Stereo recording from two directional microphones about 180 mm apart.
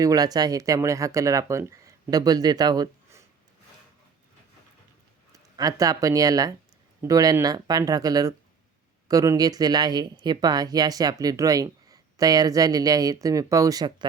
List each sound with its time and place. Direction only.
0.0 s speech: 20° right (ahead or behind)
5.3 s speech: 20° right (ahead or behind)